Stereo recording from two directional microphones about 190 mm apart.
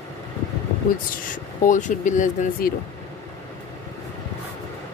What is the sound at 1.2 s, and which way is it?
Speech, 45° left (ahead or behind).